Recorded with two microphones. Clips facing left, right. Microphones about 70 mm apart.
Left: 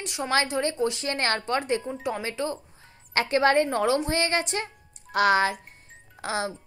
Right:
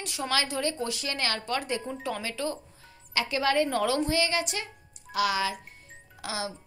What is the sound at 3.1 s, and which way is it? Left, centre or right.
A woman's voice, left.